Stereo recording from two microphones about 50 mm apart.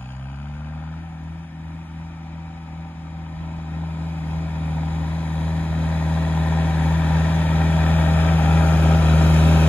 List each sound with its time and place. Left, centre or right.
3.7 s vehicle: left